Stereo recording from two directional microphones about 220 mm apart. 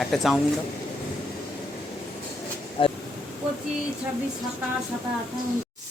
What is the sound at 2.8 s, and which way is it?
Speech, 25° left (ahead or behind).